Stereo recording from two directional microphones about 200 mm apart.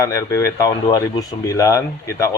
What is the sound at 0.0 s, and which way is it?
Speech, 15° left (ahead or behind).